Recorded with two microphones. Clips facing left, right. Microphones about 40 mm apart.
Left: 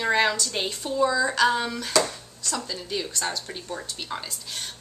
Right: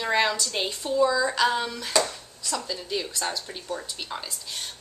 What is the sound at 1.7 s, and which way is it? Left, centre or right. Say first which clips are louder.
Speech: left 1 dB; centre.